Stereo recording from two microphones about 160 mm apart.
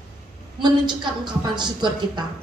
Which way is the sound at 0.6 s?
30° right (ahead or behind).